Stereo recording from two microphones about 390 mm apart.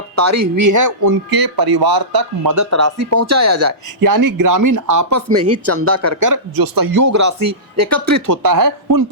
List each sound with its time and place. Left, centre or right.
0.2 s speech: right
1.0 s speech: right